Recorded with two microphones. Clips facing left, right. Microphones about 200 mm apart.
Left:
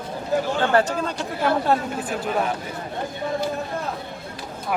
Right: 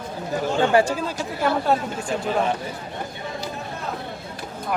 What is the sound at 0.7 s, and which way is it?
Speech, 10° right (ahead or behind).